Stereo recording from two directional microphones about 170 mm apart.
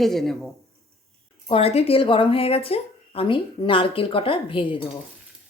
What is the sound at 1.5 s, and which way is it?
A woman's voice, 35° left (ahead or behind).